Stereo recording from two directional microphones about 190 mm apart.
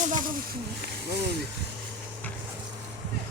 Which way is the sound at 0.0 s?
45° right (ahead or behind).